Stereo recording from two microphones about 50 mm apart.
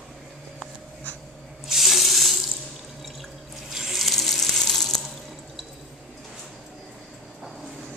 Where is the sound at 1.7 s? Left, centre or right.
Centre.